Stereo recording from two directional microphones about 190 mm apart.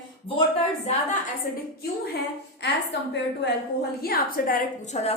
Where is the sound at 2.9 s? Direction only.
65° left (ahead or behind).